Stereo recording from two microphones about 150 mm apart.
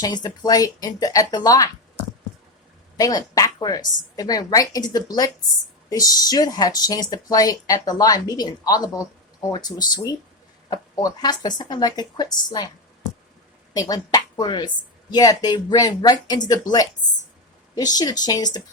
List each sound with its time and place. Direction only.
0.0 s speech: 25° left (ahead or behind)
3.0 s speech: 25° left (ahead or behind)
13.7 s speech: 25° left (ahead or behind)
17.7 s speech: 25° left (ahead or behind)